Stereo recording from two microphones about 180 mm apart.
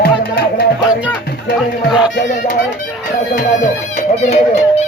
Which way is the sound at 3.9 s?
40° left (ahead or behind).